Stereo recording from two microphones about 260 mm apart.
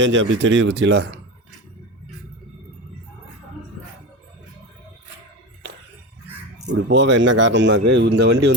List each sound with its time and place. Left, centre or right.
0.0 s speech: right
6.7 s speech: right